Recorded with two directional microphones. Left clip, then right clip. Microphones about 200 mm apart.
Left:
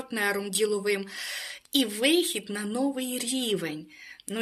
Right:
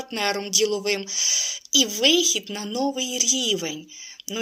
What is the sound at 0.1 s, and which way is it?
Speech, 25° left (ahead or behind).